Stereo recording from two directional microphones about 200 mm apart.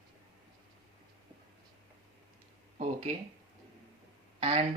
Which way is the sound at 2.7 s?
35° right (ahead or behind).